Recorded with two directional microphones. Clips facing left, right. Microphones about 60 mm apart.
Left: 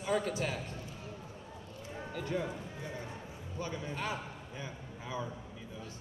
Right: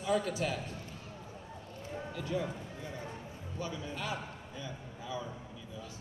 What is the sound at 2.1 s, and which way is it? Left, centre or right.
Speech, left.